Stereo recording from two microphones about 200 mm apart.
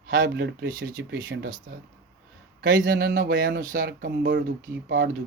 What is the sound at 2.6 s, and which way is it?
Speech, 45° right (ahead or behind).